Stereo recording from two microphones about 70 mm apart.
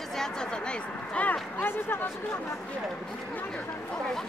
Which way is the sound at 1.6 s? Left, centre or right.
Left.